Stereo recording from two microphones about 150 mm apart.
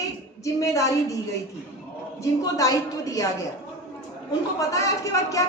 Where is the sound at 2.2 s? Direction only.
25° left (ahead or behind).